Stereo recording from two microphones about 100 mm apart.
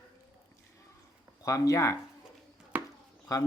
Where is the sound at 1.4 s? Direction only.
30° left (ahead or behind).